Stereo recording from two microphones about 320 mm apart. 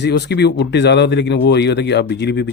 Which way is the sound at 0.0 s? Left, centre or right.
Left.